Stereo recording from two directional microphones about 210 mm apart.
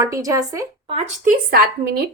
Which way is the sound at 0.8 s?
30° right (ahead or behind).